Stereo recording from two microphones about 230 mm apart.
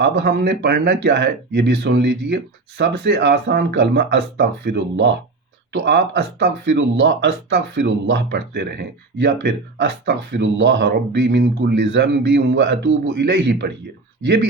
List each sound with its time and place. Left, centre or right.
0.0 s speech: right